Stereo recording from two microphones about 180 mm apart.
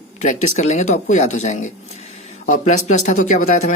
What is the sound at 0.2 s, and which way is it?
Speech, 40° left (ahead or behind).